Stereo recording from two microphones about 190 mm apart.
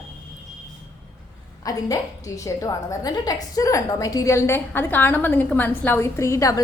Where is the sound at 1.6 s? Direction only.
20° left (ahead or behind).